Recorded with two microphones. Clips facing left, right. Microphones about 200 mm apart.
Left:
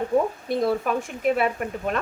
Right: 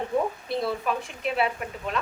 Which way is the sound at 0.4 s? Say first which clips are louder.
Left 4 dB; 45° left (ahead or behind).